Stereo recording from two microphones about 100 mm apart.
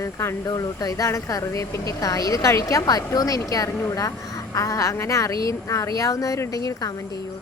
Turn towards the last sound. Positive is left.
turn(degrees=35)  # may be behind; listen again after turning